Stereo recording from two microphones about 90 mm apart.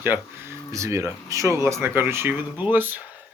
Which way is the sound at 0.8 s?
35° right (ahead or behind).